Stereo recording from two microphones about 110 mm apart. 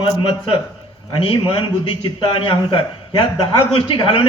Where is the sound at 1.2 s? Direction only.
55° left (ahead or behind).